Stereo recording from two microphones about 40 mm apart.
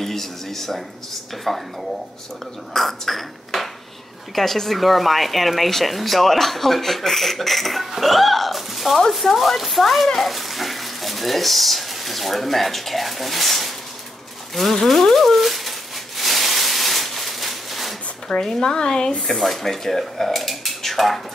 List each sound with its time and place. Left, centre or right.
0.0 s speech: centre
2.7 s speech: centre
16.2 s a sound: centre
18.3 s speech: centre
19.2 s speech: centre